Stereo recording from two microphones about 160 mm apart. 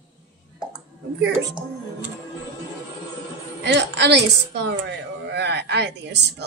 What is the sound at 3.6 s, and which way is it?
Speech, 90° right.